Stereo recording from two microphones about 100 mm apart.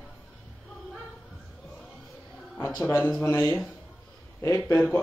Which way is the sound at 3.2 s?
30° left (ahead or behind).